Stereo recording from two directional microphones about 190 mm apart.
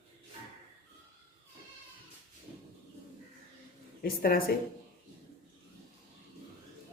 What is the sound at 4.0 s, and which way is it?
Speech, 50° left (ahead or behind).